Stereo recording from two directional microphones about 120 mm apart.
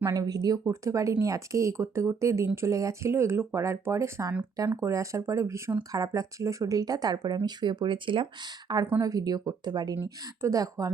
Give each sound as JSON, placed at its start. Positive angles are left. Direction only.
{"t": 0.0, "sound": "speech", "side_deg": -30}